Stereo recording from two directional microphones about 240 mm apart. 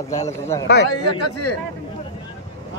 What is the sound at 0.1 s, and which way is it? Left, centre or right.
Speech, centre.